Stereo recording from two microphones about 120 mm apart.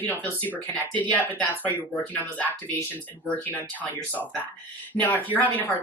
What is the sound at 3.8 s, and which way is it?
Speech, 15° left (ahead or behind).